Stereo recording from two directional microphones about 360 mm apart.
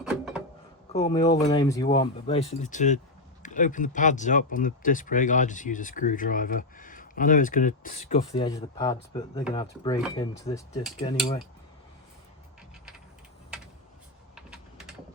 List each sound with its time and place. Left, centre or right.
0.0 s a sound: centre
0.9 s speech: centre
14.3 s typing: centre